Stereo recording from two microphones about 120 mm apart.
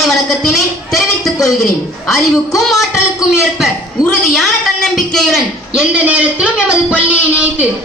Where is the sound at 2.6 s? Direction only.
Centre (ahead or behind).